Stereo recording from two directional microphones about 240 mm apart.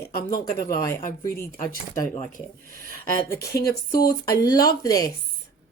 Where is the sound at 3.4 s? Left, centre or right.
Centre.